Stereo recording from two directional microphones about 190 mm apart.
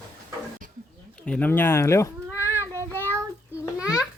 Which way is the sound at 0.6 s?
45° right (ahead or behind).